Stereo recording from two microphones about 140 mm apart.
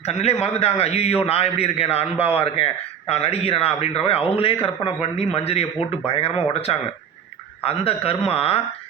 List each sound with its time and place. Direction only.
0.0 s a man's voice: 50° left (ahead or behind)